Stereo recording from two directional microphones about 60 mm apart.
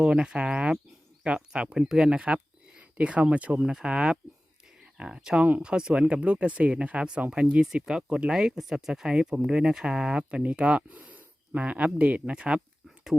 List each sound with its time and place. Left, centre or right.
0.0 s speech: centre
3.6 s speech: centre